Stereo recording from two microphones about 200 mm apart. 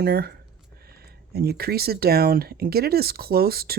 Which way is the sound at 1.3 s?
50° right (ahead or behind).